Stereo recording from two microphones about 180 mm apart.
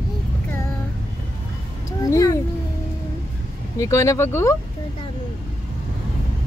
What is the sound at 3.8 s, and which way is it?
Speech, 15° left (ahead or behind).